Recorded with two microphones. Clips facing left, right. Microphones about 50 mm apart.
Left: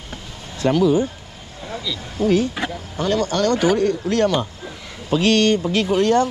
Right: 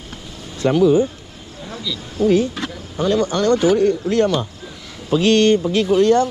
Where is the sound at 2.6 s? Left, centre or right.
Centre.